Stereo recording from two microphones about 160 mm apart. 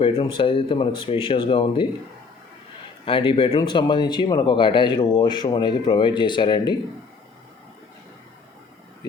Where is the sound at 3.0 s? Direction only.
30° left (ahead or behind).